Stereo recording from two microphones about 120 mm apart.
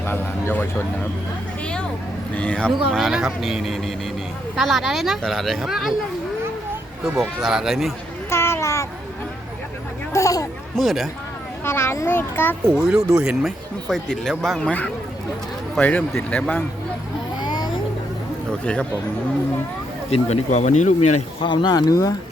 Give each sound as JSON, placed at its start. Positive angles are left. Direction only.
{"t": 0.0, "sound": "speech", "side_deg": 20}
{"t": 2.9, "sound": "speech", "side_deg": -5}
{"t": 7.0, "sound": "speech", "side_deg": -5}
{"t": 8.3, "sound": "a sound", "side_deg": 20}
{"t": 10.1, "sound": "a child's voice", "side_deg": 25}
{"t": 10.8, "sound": "speech", "side_deg": 0}
{"t": 11.6, "sound": "a child's voice", "side_deg": 20}
{"t": 12.7, "sound": "speech", "side_deg": -5}
{"t": 13.8, "sound": "speech", "side_deg": 5}
{"t": 17.4, "sound": "music", "side_deg": 35}
{"t": 18.6, "sound": "speech", "side_deg": 10}
{"t": 20.1, "sound": "speech", "side_deg": 60}
{"t": 21.4, "sound": "speech", "side_deg": 40}